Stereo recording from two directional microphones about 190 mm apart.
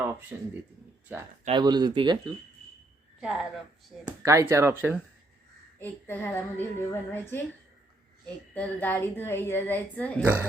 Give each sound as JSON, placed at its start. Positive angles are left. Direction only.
{"t": 0.3, "sound": "speech", "side_deg": -10}
{"t": 1.5, "sound": "speech", "side_deg": -25}
{"t": 3.2, "sound": "speech", "side_deg": -5}
{"t": 4.2, "sound": "speech", "side_deg": -15}
{"t": 5.8, "sound": "speech", "side_deg": 10}
{"t": 8.5, "sound": "speech", "side_deg": 10}